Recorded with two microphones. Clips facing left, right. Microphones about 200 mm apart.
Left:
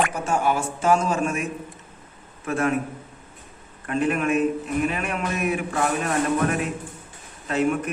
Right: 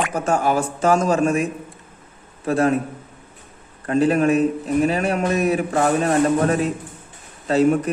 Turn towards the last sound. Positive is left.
turn(degrees=-35)  # may be behind; listen again after turning